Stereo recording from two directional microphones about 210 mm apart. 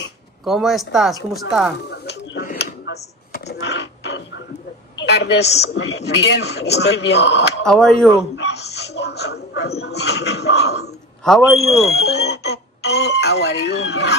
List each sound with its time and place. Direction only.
0.5 s speech: centre (ahead or behind)
1.9 s a sound: 50° left (ahead or behind)
4.9 s a man's voice: 55° left (ahead or behind)
7.6 s speech: centre (ahead or behind)
8.4 s speech: 55° left (ahead or behind)
11.2 s speech: centre (ahead or behind)
12.0 s speech: 55° left (ahead or behind)